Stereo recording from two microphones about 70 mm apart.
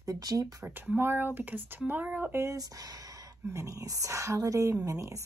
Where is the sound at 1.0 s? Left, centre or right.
Right.